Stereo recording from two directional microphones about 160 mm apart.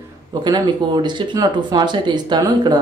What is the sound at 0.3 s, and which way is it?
Speech, 25° right (ahead or behind).